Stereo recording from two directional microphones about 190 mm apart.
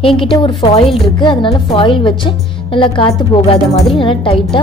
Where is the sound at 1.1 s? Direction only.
25° left (ahead or behind).